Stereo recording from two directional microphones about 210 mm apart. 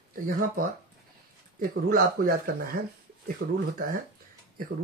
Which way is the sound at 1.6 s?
40° right (ahead or behind).